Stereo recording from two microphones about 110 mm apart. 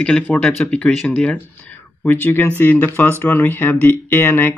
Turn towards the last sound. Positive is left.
turn(degrees=15)  # may be behind; listen again after turning